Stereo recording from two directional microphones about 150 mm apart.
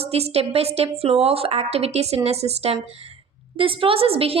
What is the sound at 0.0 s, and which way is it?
A woman's voice, 45° right (ahead or behind).